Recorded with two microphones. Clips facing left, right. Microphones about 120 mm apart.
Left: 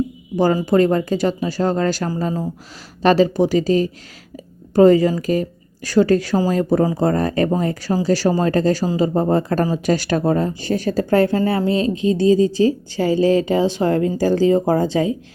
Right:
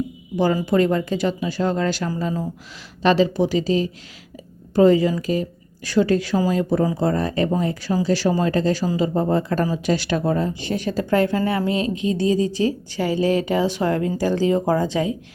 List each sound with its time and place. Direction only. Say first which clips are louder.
0.3 s a woman's voice: left 3 dB; 40° left (ahead or behind)